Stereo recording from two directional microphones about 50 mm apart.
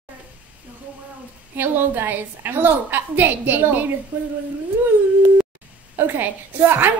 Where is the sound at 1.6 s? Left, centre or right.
Right.